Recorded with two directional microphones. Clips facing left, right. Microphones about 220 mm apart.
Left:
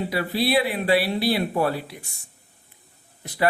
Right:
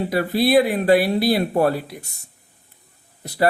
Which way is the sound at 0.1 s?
45° right (ahead or behind).